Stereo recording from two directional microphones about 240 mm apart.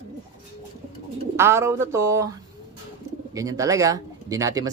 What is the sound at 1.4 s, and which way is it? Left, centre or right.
Speech, centre.